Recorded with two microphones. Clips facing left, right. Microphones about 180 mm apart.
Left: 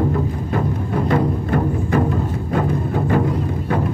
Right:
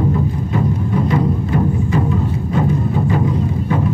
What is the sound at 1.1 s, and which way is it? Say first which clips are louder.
Music: right 1 dB; 55° left (ahead or behind).